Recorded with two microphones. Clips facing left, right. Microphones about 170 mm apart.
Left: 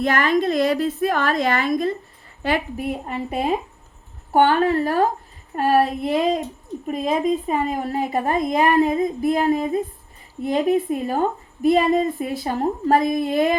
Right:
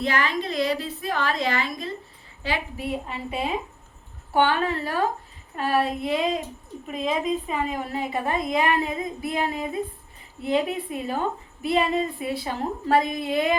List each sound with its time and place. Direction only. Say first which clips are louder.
0.0 s a woman's voice: left 6 dB; 50° left (ahead or behind)